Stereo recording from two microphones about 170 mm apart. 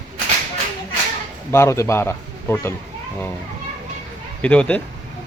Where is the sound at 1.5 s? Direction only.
15° left (ahead or behind).